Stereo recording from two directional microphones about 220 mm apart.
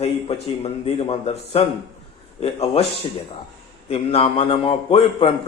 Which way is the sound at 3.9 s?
25° left (ahead or behind).